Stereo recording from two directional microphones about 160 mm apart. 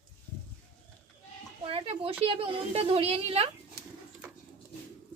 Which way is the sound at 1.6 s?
35° right (ahead or behind).